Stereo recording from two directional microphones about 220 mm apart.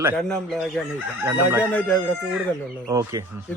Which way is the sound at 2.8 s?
15° right (ahead or behind).